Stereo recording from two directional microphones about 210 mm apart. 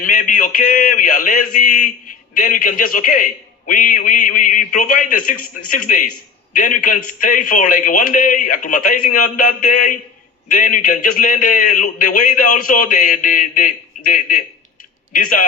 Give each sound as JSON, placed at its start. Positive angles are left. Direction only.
{"t": 0.0, "sound": "a man's voice", "side_deg": 40}